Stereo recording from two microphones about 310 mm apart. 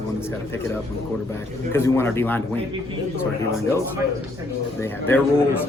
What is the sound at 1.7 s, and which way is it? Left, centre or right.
Speech, centre.